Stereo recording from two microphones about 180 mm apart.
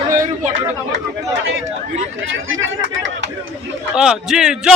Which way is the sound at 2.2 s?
90° right.